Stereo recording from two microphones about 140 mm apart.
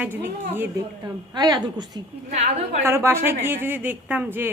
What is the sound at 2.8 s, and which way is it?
A woman's voice, 20° right (ahead or behind).